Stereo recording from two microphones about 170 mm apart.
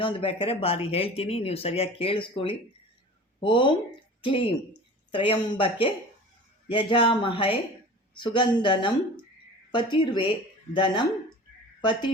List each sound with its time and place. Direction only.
0.0 s speech: 30° left (ahead or behind)